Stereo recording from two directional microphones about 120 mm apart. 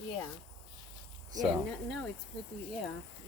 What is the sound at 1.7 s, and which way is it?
Speech, 5° left (ahead or behind).